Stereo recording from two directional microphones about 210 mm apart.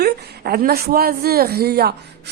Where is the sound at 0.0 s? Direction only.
45° right (ahead or behind).